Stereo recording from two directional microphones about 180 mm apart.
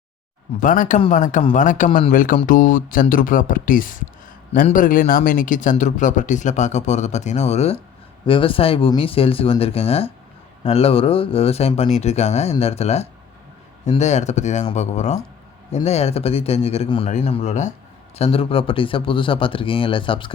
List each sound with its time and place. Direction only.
0.6 s speech: 45° left (ahead or behind); by 20.3 s 30° left (ahead or behind)